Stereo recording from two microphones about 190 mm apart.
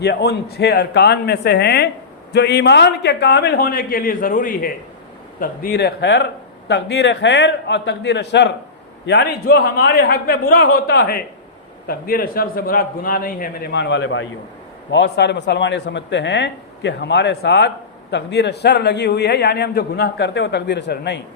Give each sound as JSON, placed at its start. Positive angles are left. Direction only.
{"t": 0.0, "sound": "a man's voice", "side_deg": 60}
{"t": 14.8, "sound": "a man's voice", "side_deg": 65}